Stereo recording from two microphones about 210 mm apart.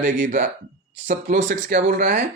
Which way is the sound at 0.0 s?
35° right (ahead or behind).